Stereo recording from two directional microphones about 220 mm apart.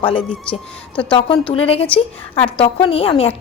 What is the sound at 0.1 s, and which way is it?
A woman's voice, 25° left (ahead or behind).